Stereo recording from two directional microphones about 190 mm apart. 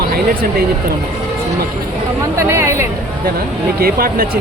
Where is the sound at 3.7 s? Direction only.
50° right (ahead or behind).